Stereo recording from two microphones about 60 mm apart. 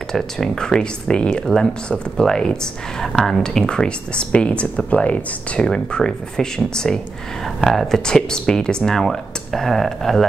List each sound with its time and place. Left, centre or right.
0.1 s speech: centre
5.7 s speech: centre